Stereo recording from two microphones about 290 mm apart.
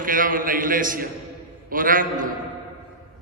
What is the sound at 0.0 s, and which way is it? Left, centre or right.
A man's voice, right.